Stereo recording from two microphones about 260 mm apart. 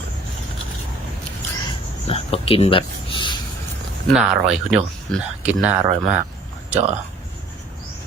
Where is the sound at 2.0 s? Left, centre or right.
Left.